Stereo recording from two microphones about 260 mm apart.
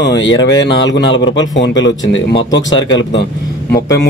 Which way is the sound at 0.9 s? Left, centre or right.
Left.